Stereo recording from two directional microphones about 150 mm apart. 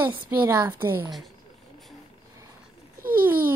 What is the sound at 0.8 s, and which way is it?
Speech, 15° right (ahead or behind).